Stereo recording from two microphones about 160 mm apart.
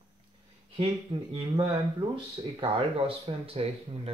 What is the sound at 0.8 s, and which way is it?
Speech, 35° right (ahead or behind).